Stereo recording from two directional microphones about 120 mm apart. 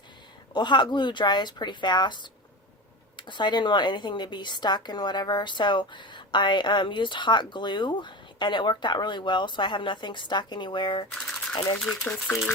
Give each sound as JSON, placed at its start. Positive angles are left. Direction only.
{"t": 0.5, "sound": "a woman's voice", "side_deg": 40}
{"t": 11.1, "sound": "a sound", "side_deg": 5}
{"t": 11.8, "sound": "speech", "side_deg": 5}